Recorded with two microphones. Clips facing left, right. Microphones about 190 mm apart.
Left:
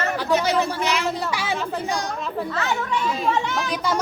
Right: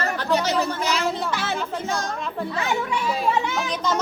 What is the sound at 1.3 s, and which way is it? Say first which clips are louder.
Speech: left 1 dB; 10° left (ahead or behind).